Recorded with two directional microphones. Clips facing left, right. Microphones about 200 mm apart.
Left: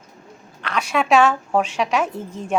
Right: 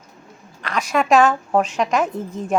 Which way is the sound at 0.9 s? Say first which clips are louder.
Right 2 dB; centre (ahead or behind).